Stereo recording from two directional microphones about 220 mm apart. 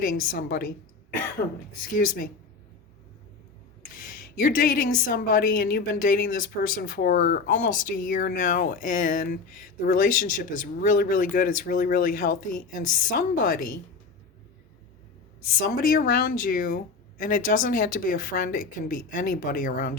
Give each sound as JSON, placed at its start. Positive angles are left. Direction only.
{"t": 0.0, "sound": "a woman's voice", "side_deg": 40}
{"t": 2.0, "sound": "a woman's voice", "side_deg": 40}
{"t": 3.9, "sound": "a woman's voice", "side_deg": 40}
{"t": 15.8, "sound": "a woman's voice", "side_deg": 40}